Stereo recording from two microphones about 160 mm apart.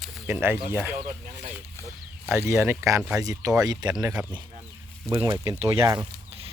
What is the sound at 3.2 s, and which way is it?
Speech, 20° right (ahead or behind).